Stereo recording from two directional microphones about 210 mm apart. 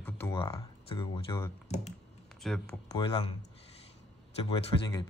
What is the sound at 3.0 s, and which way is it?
Speech, 25° left (ahead or behind).